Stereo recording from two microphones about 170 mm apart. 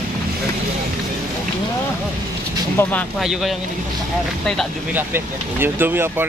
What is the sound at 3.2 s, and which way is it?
Speech, centre (ahead or behind).